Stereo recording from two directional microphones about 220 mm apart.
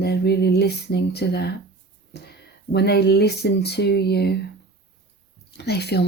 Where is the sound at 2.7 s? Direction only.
50° left (ahead or behind).